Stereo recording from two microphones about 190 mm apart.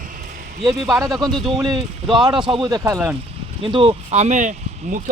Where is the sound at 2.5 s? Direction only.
25° right (ahead or behind).